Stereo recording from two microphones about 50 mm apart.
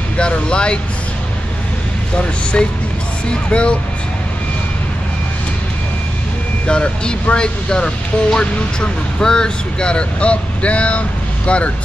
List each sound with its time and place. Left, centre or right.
0.2 s speech: centre
3.4 s speech: left
6.7 s speech: left